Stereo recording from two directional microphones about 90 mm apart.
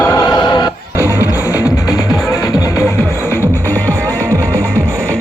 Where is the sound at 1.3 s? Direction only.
35° left (ahead or behind); by 3.9 s 20° left (ahead or behind).